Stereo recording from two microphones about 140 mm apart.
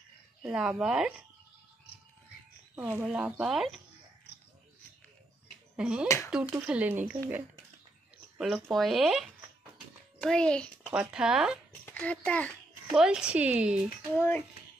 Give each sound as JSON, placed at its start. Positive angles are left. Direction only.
{"t": 0.5, "sound": "speech", "side_deg": -5}
{"t": 2.7, "sound": "speech", "side_deg": -10}
{"t": 5.8, "sound": "speech", "side_deg": -5}
{"t": 6.0, "sound": "speech", "side_deg": 20}
{"t": 6.3, "sound": "speech", "side_deg": -10}
{"t": 8.4, "sound": "speech", "side_deg": 0}
{"t": 10.2, "sound": "speech", "side_deg": 5}
{"t": 10.9, "sound": "speech", "side_deg": -5}
{"t": 11.8, "sound": "speech", "side_deg": 10}
{"t": 12.9, "sound": "speech", "side_deg": -5}
{"t": 14.1, "sound": "speech", "side_deg": 15}